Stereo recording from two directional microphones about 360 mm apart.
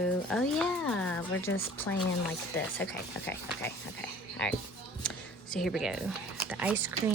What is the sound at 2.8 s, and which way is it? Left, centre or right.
Speech, centre.